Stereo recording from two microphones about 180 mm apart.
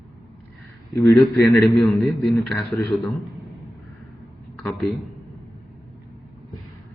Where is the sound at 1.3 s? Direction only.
15° left (ahead or behind).